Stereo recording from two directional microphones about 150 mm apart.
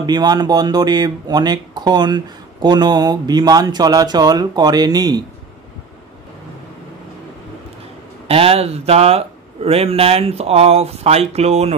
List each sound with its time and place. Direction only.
0.0 s speech: 30° right (ahead or behind)
8.3 s a man's voice: 40° right (ahead or behind)